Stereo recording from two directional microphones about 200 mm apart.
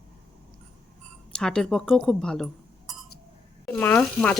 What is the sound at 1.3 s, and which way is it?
Speech, 5° left (ahead or behind).